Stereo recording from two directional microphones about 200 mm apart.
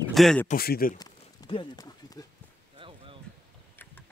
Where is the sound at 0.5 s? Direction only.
50° left (ahead or behind).